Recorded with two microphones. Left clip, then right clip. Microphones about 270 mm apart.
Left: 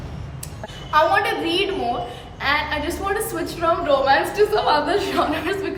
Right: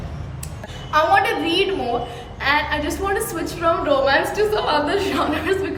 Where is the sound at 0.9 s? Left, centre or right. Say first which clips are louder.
Right 1 dB; centre.